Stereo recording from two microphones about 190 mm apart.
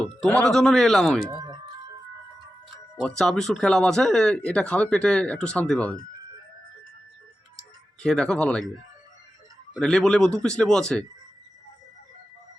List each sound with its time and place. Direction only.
0.0 s speech: 5° left (ahead or behind)
1.3 s music: 20° right (ahead or behind)
3.0 s speech: centre (ahead or behind)
8.0 s speech: 5° left (ahead or behind)
9.7 s speech: 5° left (ahead or behind)